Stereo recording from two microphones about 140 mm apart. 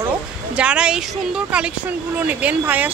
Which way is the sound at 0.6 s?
10° right (ahead or behind).